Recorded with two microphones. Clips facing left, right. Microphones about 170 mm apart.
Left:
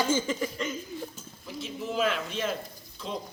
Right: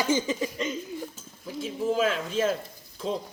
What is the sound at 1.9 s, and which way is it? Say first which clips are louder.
Speech: right 2 dB; 40° right (ahead or behind).